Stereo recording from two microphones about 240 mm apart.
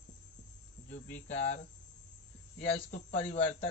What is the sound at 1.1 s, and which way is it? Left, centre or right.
Speech, left.